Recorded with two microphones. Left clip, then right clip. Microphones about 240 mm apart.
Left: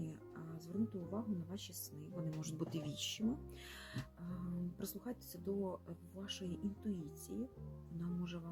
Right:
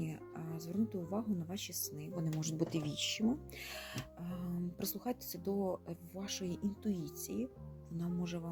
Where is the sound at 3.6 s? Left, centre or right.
Right.